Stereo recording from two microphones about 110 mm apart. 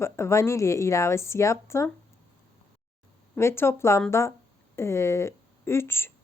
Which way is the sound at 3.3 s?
20° left (ahead or behind).